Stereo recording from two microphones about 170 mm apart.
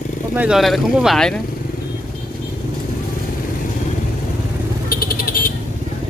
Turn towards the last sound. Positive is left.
turn(degrees=60)  # may be behind; listen again after turning